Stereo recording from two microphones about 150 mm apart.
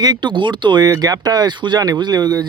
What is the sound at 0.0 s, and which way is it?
Speech, 30° right (ahead or behind).